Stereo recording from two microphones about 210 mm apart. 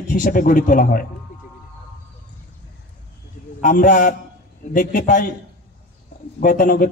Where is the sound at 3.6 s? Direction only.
40° left (ahead or behind).